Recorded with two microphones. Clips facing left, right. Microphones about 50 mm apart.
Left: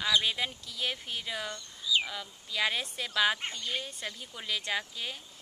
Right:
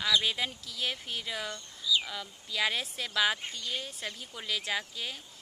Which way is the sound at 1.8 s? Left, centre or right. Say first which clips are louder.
Even; left.